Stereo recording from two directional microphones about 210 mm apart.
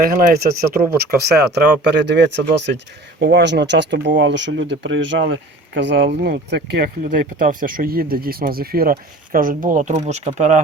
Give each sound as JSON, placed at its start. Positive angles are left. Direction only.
{"t": 0.0, "sound": "speech", "side_deg": -45}